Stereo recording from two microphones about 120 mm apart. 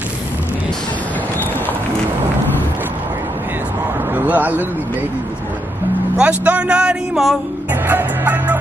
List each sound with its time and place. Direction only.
4.1 s a sound: 15° right (ahead or behind)
6.1 s speech: 10° right (ahead or behind)
7.9 s music: 15° right (ahead or behind)